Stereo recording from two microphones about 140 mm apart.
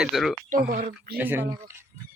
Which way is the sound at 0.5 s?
75° right (ahead or behind).